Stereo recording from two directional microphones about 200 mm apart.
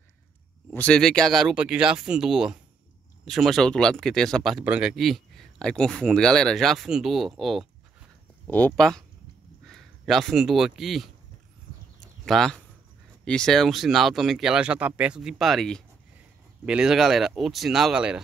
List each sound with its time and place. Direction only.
0.7 s speech: 5° left (ahead or behind)
12.0 s a sound: centre (ahead or behind)
13.2 s speech: 5° left (ahead or behind)